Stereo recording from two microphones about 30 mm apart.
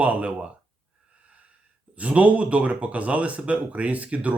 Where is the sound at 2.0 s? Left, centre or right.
Right.